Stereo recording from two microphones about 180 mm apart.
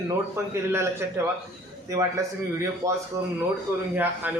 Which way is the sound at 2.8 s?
15° right (ahead or behind).